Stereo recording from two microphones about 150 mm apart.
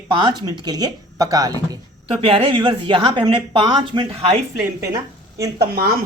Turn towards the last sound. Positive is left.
turn(degrees=-90)